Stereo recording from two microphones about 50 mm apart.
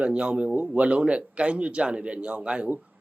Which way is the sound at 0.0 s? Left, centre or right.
Right.